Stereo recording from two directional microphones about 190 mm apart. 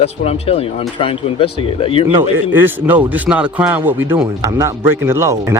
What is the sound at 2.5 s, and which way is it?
Speech, 10° right (ahead or behind).